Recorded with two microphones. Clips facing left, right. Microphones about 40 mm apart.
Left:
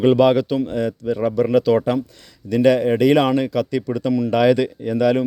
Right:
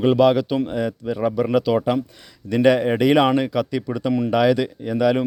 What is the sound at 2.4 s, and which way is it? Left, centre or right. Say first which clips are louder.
A man's voice: left 1 dB; right.